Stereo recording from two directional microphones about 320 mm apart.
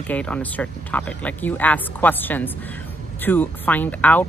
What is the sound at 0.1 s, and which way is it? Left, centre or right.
Speech, centre.